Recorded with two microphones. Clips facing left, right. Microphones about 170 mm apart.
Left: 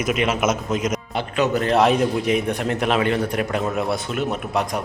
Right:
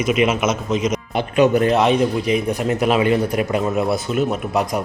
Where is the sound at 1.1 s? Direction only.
15° right (ahead or behind).